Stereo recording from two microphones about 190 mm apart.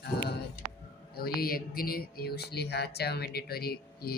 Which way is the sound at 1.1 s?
55° left (ahead or behind).